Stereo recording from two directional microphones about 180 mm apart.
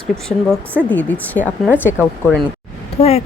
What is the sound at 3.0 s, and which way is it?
Speech, 35° left (ahead or behind).